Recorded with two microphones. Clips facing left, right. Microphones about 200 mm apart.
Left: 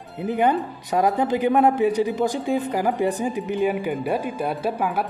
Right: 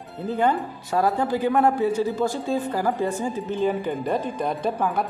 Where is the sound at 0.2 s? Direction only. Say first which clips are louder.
Left 2 dB; 15° left (ahead or behind).